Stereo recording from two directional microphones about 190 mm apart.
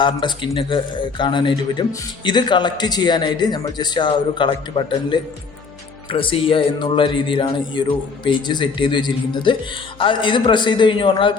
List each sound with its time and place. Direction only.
0.0 s speech: 25° left (ahead or behind)